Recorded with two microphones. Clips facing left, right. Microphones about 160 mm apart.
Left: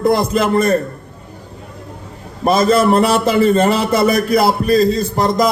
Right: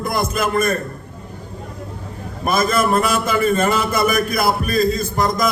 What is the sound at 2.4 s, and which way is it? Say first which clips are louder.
A man's voice: left 6 dB; 30° left (ahead or behind).